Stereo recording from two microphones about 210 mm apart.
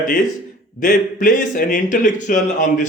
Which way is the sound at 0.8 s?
40° left (ahead or behind).